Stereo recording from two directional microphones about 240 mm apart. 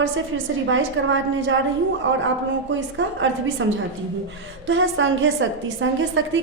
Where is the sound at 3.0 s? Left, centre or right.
Right.